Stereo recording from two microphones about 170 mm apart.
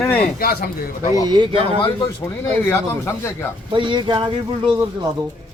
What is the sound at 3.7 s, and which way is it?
Speech, 30° right (ahead or behind).